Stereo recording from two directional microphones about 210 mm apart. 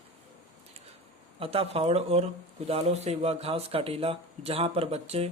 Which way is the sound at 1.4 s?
25° right (ahead or behind).